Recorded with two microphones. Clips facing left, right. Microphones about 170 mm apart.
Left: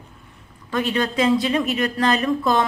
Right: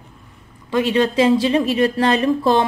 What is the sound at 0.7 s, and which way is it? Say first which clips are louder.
Speech: right 5 dB; 25° right (ahead or behind).